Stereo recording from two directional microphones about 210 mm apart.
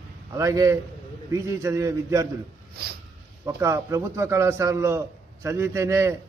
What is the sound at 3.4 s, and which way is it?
A man's voice, 15° right (ahead or behind).